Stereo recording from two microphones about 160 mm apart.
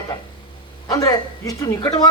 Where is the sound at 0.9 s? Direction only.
20° left (ahead or behind).